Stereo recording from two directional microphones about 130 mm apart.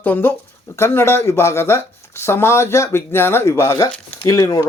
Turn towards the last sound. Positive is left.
turn(degrees=25)  # may be behind; listen again after turning